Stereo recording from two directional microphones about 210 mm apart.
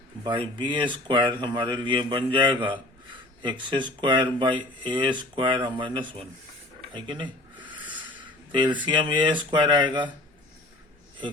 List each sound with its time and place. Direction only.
0.3 s speech: 20° right (ahead or behind)